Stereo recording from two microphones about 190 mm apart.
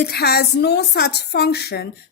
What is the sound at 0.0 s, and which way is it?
A woman's voice, 55° left (ahead or behind).